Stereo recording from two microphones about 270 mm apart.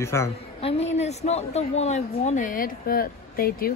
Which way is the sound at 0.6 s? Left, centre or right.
Left.